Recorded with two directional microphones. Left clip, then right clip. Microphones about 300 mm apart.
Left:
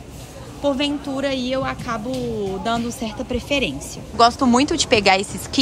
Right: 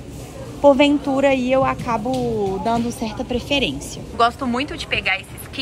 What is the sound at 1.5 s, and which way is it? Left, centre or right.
A woman's voice, centre.